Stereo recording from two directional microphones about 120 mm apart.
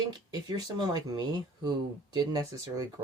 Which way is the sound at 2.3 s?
30° right (ahead or behind).